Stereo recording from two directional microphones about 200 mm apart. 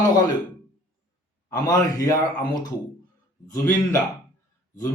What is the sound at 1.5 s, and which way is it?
Speech, 20° left (ahead or behind).